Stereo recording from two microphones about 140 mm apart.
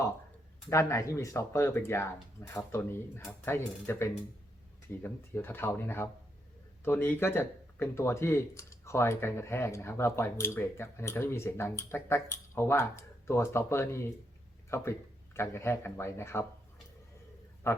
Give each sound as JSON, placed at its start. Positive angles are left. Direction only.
{"t": 0.7, "sound": "a man's voice", "side_deg": 20}
{"t": 17.7, "sound": "a man's voice", "side_deg": 20}